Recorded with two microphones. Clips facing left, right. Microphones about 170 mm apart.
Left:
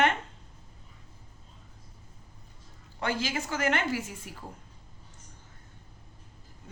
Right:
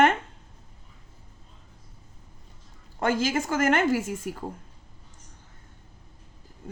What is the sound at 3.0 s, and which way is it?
A woman's voice, 45° right (ahead or behind).